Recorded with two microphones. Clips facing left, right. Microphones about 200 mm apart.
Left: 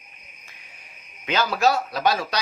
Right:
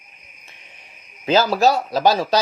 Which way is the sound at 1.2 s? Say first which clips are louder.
Right 7 dB; 30° right (ahead or behind).